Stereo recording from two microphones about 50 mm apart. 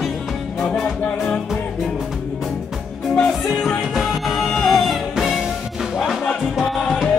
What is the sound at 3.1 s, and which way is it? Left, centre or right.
Music, centre.